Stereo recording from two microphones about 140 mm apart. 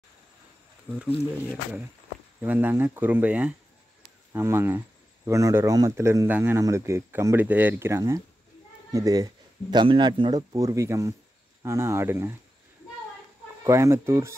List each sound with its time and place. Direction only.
0.8 s speech: 5° right (ahead or behind)
2.4 s speech: 15° right (ahead or behind)
13.7 s speech: 20° right (ahead or behind)